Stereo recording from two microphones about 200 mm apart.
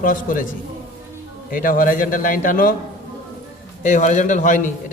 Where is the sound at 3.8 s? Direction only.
40° left (ahead or behind).